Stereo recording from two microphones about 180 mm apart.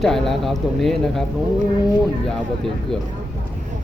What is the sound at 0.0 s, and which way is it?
Speech, centre (ahead or behind).